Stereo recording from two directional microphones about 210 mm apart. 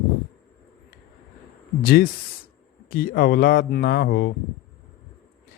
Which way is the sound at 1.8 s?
45° left (ahead or behind).